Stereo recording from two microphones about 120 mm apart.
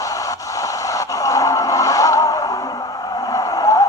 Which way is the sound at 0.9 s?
30° left (ahead or behind).